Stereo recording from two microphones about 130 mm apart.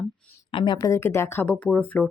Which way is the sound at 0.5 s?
35° left (ahead or behind).